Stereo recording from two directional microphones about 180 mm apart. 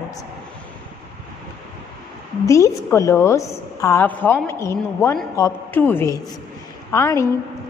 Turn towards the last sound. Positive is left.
turn(degrees=15)  # may be behind; listen again after turning